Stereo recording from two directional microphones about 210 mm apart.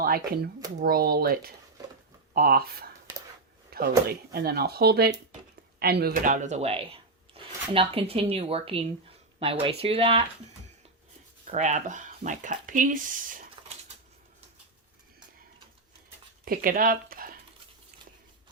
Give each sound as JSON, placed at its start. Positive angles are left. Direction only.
{"t": 0.8, "sound": "speech", "side_deg": -45}
{"t": 3.7, "sound": "a sound", "side_deg": -45}
{"t": 4.3, "sound": "speech", "side_deg": -50}
{"t": 11.5, "sound": "speech", "side_deg": -35}
{"t": 16.5, "sound": "speech", "side_deg": -45}